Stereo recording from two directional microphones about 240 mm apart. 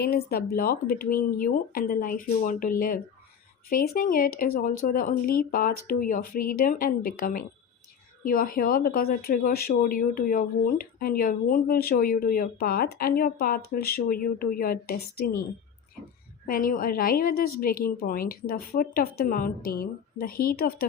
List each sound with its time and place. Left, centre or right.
0.0 s speech: left
16.5 s speech: left